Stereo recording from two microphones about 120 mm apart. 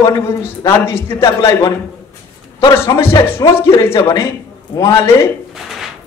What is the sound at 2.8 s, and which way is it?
A man's voice, 20° left (ahead or behind).